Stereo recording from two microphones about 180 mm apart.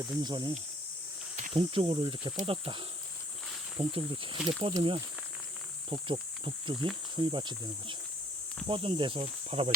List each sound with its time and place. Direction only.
0.0 s speech: 25° right (ahead or behind)
1.5 s speech: 30° right (ahead or behind)